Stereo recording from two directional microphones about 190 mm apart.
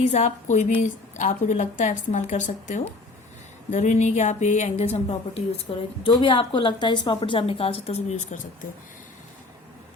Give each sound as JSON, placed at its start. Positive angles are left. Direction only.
{"t": 0.0, "sound": "a woman's voice", "side_deg": 35}